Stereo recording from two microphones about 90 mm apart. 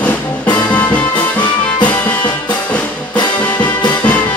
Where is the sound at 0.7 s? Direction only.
15° left (ahead or behind).